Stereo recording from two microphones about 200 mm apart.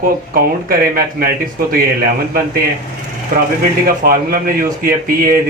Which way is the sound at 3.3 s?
40° right (ahead or behind).